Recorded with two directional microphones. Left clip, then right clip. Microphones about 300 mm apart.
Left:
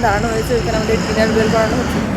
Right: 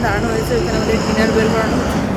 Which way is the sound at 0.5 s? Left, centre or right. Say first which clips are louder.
Left 1 dB; right.